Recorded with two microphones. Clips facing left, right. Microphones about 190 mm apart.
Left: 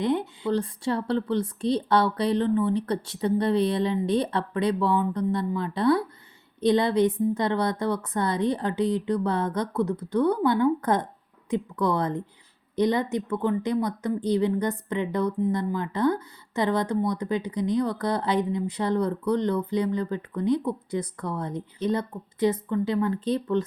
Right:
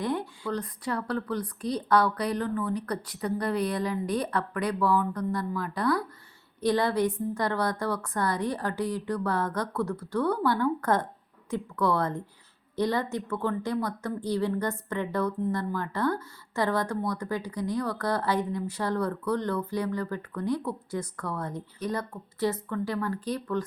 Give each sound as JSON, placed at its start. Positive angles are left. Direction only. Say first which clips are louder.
{"t": 0.0, "sound": "a woman's voice", "louder": "left 5 dB", "side_deg": 20}